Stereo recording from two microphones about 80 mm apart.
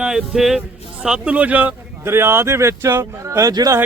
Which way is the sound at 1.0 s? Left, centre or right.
Centre.